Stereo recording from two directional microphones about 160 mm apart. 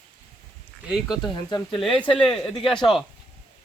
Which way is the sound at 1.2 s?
25° left (ahead or behind).